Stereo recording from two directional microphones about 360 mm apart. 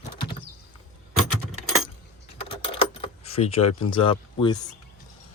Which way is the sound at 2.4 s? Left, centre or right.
Centre.